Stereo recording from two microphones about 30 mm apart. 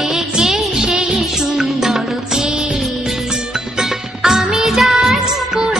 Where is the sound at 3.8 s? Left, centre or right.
Centre.